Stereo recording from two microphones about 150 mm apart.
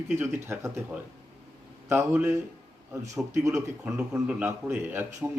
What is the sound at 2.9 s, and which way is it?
Speech, 20° right (ahead or behind).